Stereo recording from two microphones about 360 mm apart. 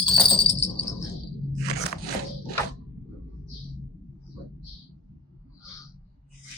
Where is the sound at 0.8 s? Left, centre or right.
Centre.